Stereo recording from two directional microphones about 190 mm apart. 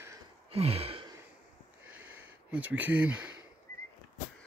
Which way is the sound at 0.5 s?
30° right (ahead or behind).